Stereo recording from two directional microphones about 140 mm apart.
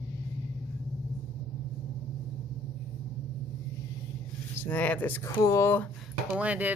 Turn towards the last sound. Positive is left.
turn(degrees=-10)  # may be behind; listen again after turning